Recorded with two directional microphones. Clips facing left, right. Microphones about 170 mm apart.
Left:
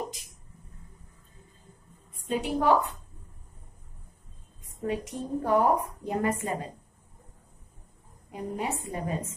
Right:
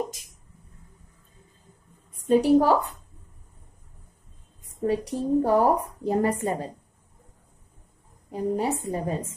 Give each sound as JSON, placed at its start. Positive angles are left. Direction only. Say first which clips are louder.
{"t": 2.2, "sound": "a woman's voice", "louder": "right 7 dB", "side_deg": -40}
{"t": 4.8, "sound": "a woman's voice", "louder": "right 7 dB", "side_deg": -35}
{"t": 8.3, "sound": "a woman's voice", "louder": "right 7 dB", "side_deg": -35}